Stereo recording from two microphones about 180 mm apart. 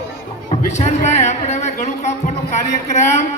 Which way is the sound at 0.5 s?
40° left (ahead or behind).